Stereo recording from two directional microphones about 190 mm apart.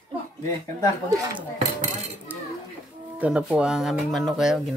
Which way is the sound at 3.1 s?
5° right (ahead or behind).